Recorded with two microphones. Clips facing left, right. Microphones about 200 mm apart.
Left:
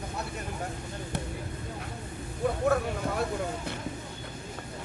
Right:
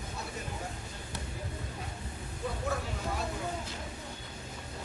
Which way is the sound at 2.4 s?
55° left (ahead or behind).